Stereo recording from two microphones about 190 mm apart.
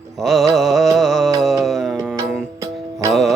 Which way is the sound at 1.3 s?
Centre (ahead or behind).